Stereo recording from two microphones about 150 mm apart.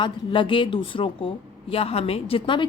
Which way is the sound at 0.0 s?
35° left (ahead or behind).